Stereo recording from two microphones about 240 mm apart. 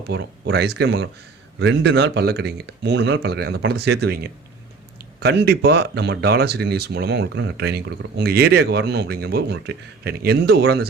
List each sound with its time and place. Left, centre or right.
0.1 s speech: right